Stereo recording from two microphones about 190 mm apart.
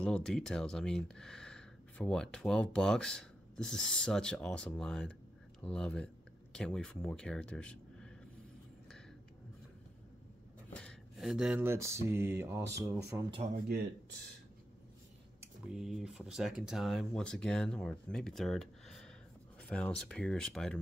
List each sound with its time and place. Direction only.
0.0 s speech: 5° left (ahead or behind)
10.7 s speech: 5° left (ahead or behind); by 12.0 s 15° right (ahead or behind)
12.1 s mantra: 15° right (ahead or behind)
15.4 s speech: 5° right (ahead or behind)